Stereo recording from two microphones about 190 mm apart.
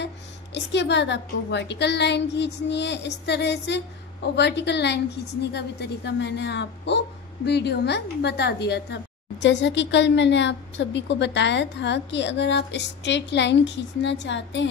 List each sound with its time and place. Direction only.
0.7 s a woman's voice: 65° left (ahead or behind)